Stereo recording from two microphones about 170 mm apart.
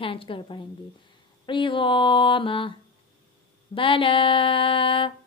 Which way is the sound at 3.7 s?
30° left (ahead or behind).